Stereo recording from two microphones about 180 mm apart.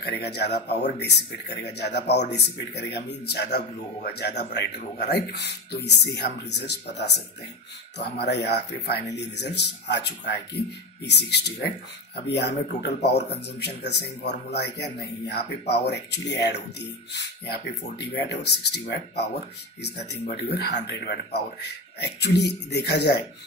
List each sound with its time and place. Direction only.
0.0 s a man's voice: 65° left (ahead or behind)